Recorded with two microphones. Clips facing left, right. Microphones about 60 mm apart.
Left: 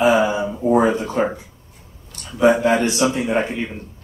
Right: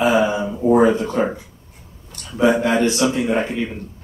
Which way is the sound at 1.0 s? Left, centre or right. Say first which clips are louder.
Even; centre.